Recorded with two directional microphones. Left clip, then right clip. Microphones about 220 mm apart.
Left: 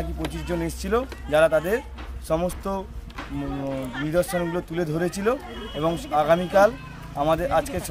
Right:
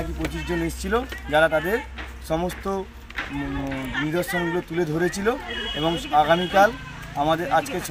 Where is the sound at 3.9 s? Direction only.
25° left (ahead or behind).